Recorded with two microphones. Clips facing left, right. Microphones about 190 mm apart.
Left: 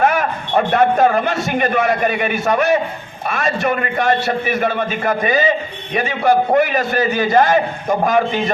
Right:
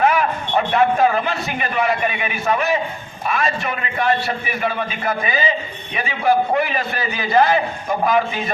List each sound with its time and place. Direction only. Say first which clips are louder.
0.0 s a man's voice: left 1 dB; 45° left (ahead or behind)